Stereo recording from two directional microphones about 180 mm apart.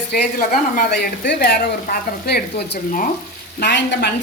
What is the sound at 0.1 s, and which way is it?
Speech, 50° left (ahead or behind).